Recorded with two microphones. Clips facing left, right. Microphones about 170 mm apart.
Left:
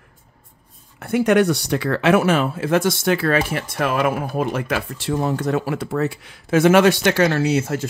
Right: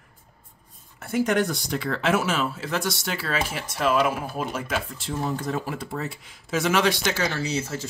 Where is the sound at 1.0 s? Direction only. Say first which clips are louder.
Left 7 dB; 65° left (ahead or behind).